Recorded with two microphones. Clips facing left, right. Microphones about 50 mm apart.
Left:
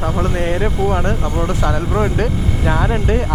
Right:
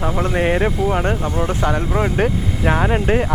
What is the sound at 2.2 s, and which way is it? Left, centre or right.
Speech, right.